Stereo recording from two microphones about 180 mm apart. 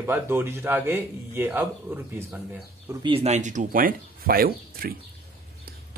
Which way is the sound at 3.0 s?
30° right (ahead or behind).